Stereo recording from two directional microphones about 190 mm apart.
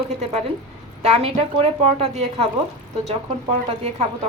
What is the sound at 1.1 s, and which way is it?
A woman's voice, 30° right (ahead or behind).